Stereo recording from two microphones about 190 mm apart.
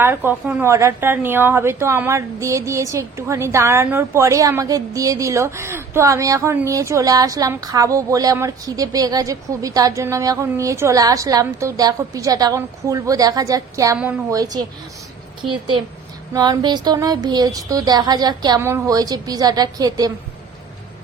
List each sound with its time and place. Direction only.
0.0 s a woman's voice: 10° right (ahead or behind)
16.3 s speech: 20° right (ahead or behind)